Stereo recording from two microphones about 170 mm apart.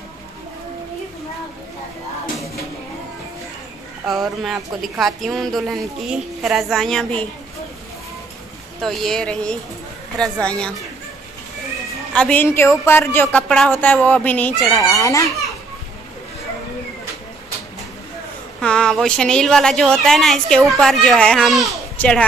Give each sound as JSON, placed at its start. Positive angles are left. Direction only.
{"t": 4.0, "sound": "speech", "side_deg": 0}
{"t": 8.8, "sound": "speech", "side_deg": 0}
{"t": 12.1, "sound": "a woman's voice", "side_deg": 5}
{"t": 14.8, "sound": "a child's voice", "side_deg": 20}
{"t": 18.6, "sound": "speech", "side_deg": 5}